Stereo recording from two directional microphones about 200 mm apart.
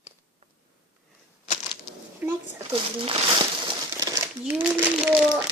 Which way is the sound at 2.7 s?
25° right (ahead or behind).